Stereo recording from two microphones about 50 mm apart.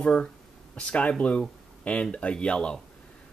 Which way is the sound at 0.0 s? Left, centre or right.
Centre.